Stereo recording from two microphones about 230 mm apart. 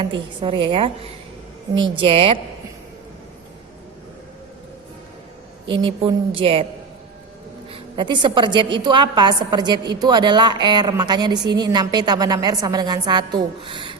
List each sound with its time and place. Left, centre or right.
0.4 s a woman's voice: right
5.7 s a woman's voice: right
7.7 s a woman's voice: centre